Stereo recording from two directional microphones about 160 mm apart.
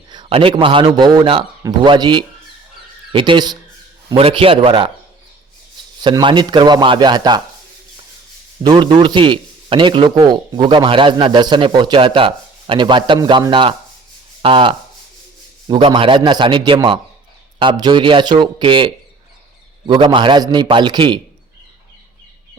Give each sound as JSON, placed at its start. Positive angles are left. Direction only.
{"t": 0.3, "sound": "a man's voice", "side_deg": -35}
{"t": 6.0, "sound": "a man's voice", "side_deg": -30}
{"t": 8.6, "sound": "a man's voice", "side_deg": -30}